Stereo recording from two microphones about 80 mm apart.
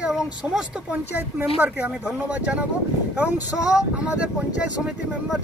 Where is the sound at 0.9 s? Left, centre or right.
Right.